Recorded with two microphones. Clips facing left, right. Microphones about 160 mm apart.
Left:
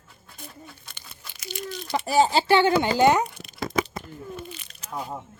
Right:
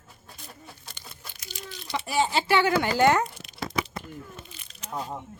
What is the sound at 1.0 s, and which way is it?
Crumpling, 80° left.